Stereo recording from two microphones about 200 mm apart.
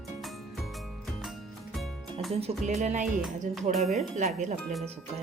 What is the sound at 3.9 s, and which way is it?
Speech, 35° right (ahead or behind).